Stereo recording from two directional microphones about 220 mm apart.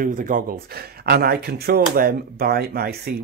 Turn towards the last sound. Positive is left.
turn(degrees=-45)  # may be behind; listen again after turning